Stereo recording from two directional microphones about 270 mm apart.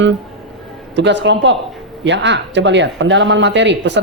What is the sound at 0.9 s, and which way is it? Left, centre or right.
Speech, right.